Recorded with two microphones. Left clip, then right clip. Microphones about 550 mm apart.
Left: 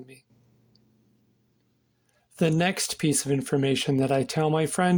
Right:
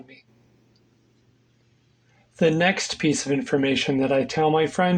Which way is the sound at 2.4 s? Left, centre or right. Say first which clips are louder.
Right 5 dB; left.